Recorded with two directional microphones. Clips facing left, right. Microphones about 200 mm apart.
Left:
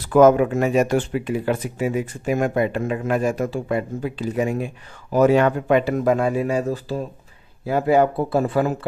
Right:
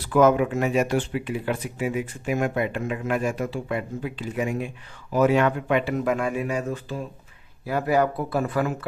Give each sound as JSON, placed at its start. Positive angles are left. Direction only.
{"t": 0.1, "sound": "speech", "side_deg": 45}